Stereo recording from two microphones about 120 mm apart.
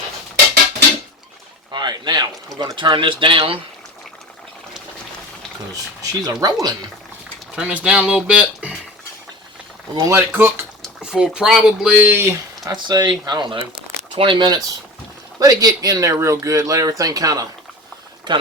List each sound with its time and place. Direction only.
1.7 s a sound: 40° right (ahead or behind)
2.6 s speech: 35° right (ahead or behind)
5.7 s speech: 30° right (ahead or behind)
7.5 s speech: 10° right (ahead or behind)
10.1 s speech: 20° right (ahead or behind)
11.0 s speech: 5° right (ahead or behind)
12.6 s speech: 35° right (ahead or behind)
18.3 s speech: 40° right (ahead or behind)